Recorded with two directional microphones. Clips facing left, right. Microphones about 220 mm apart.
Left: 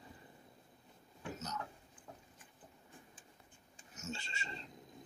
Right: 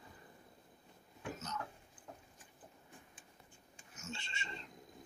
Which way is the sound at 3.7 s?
40° left (ahead or behind).